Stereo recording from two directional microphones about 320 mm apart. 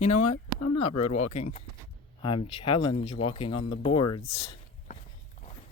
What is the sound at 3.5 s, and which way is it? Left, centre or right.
Speech, left.